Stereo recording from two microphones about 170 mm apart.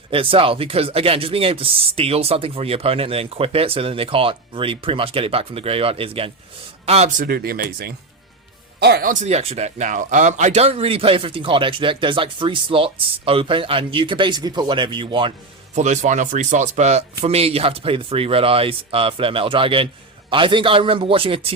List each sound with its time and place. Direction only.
0.1 s speech: 30° right (ahead or behind)
7.3 s speech: 60° right (ahead or behind)
9.2 s speech: 40° right (ahead or behind)
15.7 s speech: 45° right (ahead or behind)